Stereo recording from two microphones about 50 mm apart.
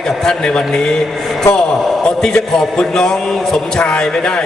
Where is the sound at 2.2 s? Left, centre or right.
Centre.